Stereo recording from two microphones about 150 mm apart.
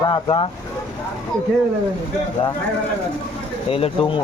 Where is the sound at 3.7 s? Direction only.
40° left (ahead or behind).